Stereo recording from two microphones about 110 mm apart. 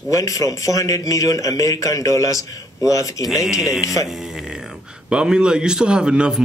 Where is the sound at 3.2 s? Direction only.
5° right (ahead or behind).